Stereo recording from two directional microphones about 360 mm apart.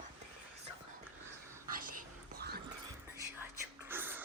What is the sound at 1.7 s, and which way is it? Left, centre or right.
Dog, right.